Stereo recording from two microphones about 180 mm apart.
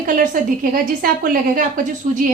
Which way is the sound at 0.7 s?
55° right (ahead or behind).